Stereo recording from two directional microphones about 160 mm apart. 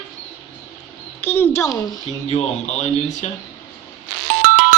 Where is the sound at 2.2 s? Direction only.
40° left (ahead or behind).